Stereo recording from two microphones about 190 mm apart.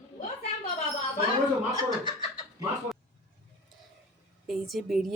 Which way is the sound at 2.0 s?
25° left (ahead or behind).